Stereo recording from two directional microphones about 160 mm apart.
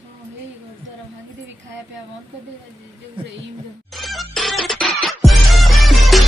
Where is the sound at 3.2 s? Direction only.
35° right (ahead or behind).